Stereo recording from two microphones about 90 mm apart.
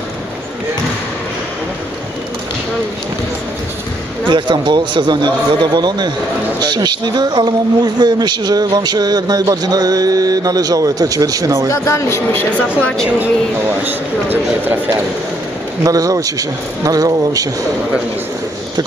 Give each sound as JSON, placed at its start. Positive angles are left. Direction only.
{"t": 4.3, "sound": "a man's voice", "side_deg": -60}
{"t": 11.8, "sound": "speech", "side_deg": 35}
{"t": 12.8, "sound": "speech", "side_deg": 5}
{"t": 13.8, "sound": "speech", "side_deg": -20}
{"t": 15.8, "sound": "speech", "side_deg": -40}